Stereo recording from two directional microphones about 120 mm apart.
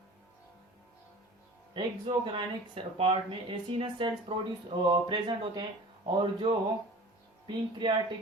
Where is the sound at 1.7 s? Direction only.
40° right (ahead or behind).